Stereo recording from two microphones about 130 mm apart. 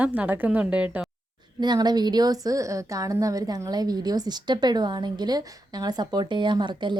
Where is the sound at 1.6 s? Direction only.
35° right (ahead or behind).